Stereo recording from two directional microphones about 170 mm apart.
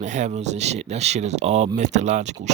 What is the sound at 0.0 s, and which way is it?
Speech, 45° right (ahead or behind).